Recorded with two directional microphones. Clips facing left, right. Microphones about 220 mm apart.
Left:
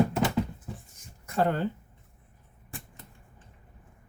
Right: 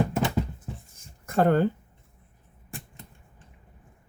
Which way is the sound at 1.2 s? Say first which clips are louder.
Right 5 dB; 50° right (ahead or behind).